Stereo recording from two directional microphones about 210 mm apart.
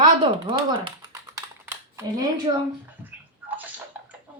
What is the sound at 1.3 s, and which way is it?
Typing, 10° right (ahead or behind).